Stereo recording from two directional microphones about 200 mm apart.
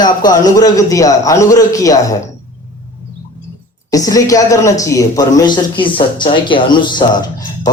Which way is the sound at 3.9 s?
15° left (ahead or behind).